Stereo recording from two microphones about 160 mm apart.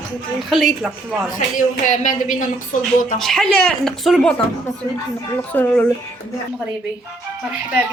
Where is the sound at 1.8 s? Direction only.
50° left (ahead or behind).